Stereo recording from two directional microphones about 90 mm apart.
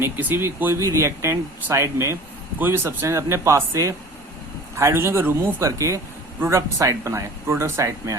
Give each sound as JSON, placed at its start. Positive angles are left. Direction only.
{"t": 0.0, "sound": "speech", "side_deg": -25}